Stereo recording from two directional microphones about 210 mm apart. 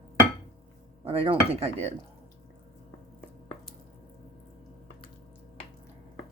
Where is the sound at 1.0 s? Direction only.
25° right (ahead or behind).